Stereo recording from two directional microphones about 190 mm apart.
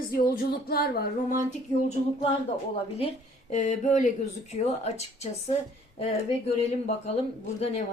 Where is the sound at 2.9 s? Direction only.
35° left (ahead or behind).